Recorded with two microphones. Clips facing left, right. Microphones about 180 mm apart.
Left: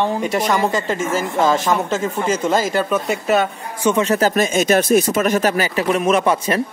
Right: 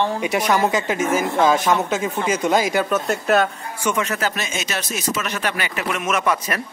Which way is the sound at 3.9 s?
30° left (ahead or behind).